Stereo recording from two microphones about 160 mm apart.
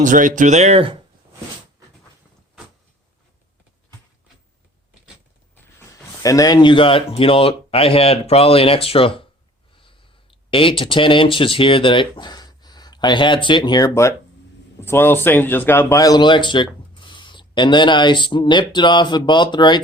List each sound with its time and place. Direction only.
0.0 s speech: 55° right (ahead or behind); by 0.9 s 40° right (ahead or behind)
6.2 s speech: 20° left (ahead or behind)
9.7 s snort: 30° left (ahead or behind)
10.5 s speech: 35° left (ahead or behind)